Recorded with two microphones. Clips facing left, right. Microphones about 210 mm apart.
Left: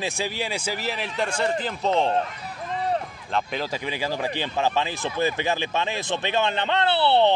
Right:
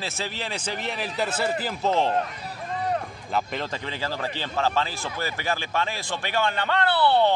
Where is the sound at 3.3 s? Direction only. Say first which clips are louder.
Left 1 dB; centre (ahead or behind).